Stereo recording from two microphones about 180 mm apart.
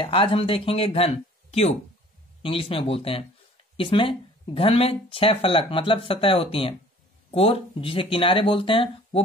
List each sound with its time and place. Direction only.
0.0 s speech: 30° left (ahead or behind)